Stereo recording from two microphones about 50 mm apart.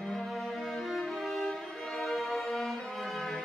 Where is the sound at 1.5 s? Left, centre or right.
Centre.